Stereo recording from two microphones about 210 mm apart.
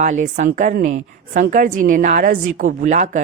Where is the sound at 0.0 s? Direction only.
35° right (ahead or behind).